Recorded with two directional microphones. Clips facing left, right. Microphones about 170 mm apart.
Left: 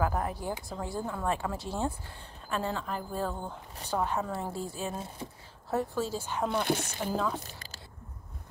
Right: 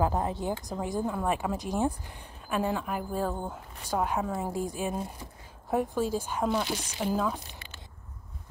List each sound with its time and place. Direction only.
0.0 s a woman's voice: 25° right (ahead or behind)
6.6 s speech: 55° left (ahead or behind)
7.0 s a woman's voice: 10° right (ahead or behind)
7.4 s squish: 40° left (ahead or behind)